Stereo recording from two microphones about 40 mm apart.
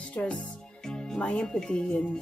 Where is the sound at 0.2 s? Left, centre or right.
Left.